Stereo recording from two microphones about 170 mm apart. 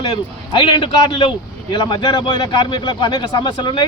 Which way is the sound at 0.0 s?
30° left (ahead or behind).